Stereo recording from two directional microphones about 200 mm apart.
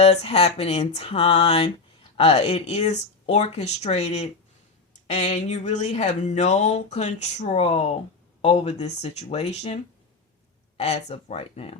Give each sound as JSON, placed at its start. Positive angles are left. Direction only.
{"t": 0.0, "sound": "speech", "side_deg": 30}